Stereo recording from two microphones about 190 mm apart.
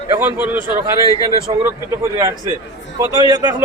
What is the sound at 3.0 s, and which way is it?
Speech, 20° right (ahead or behind).